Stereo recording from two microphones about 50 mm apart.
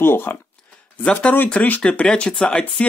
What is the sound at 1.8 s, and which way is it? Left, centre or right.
Speech, centre.